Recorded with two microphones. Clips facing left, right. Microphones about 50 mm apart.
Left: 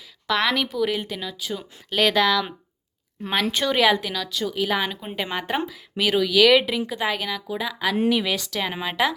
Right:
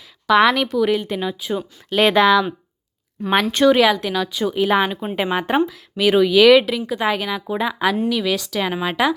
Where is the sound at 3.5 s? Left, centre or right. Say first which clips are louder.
Right 6 dB; centre.